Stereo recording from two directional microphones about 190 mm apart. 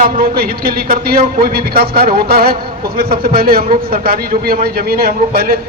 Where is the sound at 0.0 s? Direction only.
50° right (ahead or behind).